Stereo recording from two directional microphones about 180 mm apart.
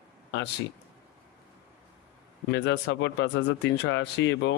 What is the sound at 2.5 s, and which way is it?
Speech, 80° left.